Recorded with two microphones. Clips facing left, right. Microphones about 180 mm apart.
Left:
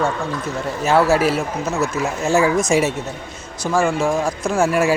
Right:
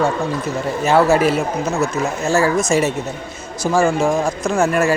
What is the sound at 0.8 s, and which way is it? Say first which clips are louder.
Speech: right 2 dB; centre (ahead or behind).